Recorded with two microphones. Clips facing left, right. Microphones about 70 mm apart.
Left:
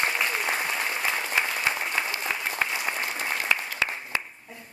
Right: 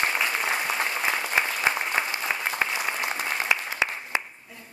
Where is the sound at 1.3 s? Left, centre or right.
Centre.